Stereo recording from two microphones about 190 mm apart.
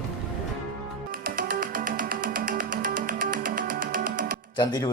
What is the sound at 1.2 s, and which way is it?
Music, 50° right (ahead or behind).